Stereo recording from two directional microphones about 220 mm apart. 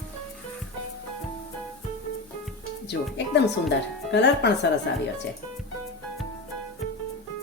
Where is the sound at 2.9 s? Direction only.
50° left (ahead or behind).